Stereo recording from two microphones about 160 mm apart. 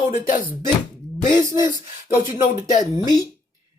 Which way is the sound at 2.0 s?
15° right (ahead or behind).